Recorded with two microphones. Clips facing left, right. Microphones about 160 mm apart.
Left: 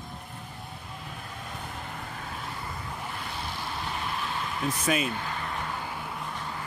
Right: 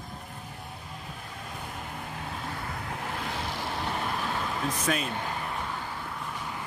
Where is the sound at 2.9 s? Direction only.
90° right.